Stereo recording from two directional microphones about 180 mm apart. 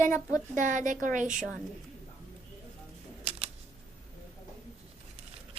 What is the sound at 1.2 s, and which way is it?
Speech, 5° right (ahead or behind).